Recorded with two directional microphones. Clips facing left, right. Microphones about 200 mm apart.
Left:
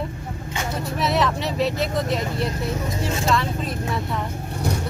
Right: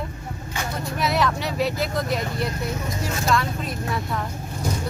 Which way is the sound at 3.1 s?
25° left (ahead or behind).